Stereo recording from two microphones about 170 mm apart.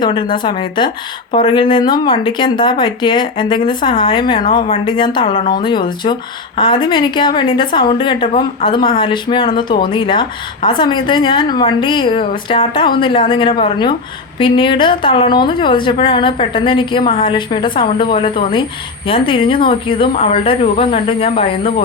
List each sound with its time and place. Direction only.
0.0 s a woman's voice: 25° left (ahead or behind)